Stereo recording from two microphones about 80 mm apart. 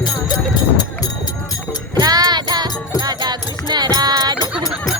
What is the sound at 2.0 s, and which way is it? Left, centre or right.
Music, right.